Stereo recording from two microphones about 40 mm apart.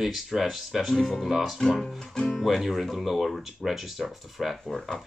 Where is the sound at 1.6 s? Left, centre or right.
Centre.